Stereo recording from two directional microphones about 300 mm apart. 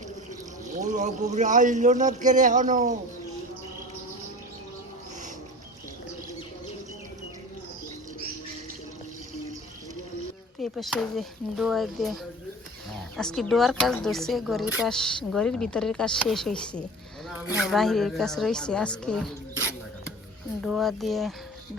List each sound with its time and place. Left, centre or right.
0.7 s speech: right
10.6 s speech: centre